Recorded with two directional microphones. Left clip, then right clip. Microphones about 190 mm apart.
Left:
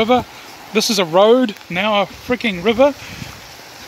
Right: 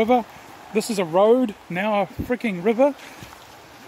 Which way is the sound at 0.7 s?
10° right (ahead or behind).